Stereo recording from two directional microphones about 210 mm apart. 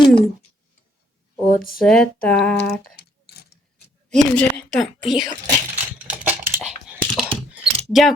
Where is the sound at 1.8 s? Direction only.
5° left (ahead or behind).